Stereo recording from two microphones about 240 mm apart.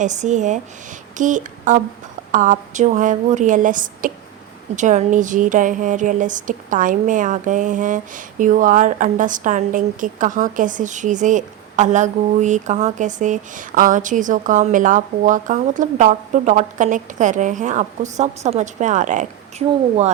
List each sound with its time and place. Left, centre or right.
0.0 s speech: right